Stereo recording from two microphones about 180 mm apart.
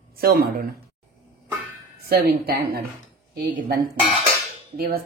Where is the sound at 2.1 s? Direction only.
55° right (ahead or behind).